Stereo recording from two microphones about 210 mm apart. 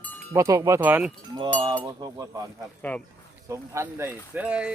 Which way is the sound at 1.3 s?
20° right (ahead or behind).